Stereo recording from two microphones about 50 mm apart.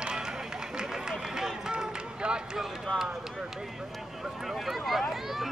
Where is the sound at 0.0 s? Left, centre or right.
Centre.